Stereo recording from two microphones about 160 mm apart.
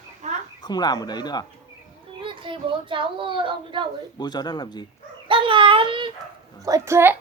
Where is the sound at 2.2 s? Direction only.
30° right (ahead or behind).